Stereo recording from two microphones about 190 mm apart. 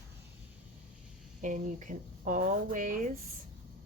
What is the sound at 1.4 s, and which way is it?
Speech, 40° right (ahead or behind).